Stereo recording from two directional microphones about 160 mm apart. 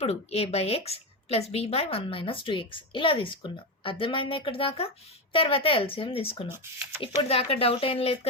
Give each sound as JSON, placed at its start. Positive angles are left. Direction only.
{"t": 0.0, "sound": "a woman's voice", "side_deg": 40}
{"t": 6.5, "sound": "speech", "side_deg": -15}
{"t": 7.0, "sound": "a woman's voice", "side_deg": 35}